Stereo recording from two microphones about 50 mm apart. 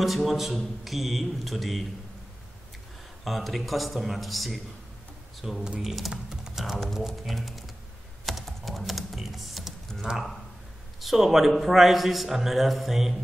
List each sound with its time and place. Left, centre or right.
0.0 s speech: centre
3.3 s speech: centre
5.6 s speech: centre
5.9 s speech: centre
8.3 s typing: centre
10.1 s speech: centre